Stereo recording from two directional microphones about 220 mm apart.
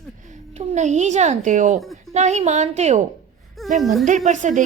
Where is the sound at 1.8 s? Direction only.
Centre (ahead or behind).